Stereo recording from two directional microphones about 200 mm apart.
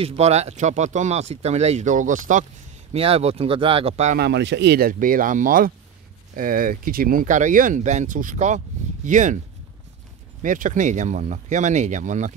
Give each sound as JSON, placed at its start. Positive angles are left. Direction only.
{"t": 0.0, "sound": "speech", "side_deg": -30}
{"t": 2.9, "sound": "speech", "side_deg": -30}
{"t": 4.2, "sound": "speech", "side_deg": -60}
{"t": 10.4, "sound": "speech", "side_deg": -40}